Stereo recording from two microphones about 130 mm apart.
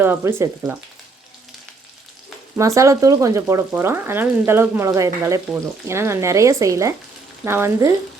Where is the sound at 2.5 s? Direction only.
25° right (ahead or behind).